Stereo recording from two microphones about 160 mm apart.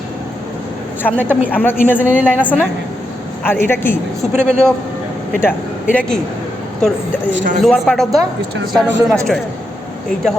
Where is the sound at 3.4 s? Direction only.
15° left (ahead or behind).